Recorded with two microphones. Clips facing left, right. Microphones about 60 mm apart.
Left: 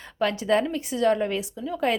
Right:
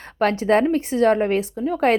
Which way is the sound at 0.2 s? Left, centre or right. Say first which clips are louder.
Right 5 dB; right.